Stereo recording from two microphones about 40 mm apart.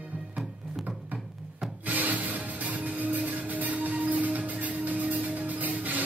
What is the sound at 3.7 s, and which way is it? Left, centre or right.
Music, right.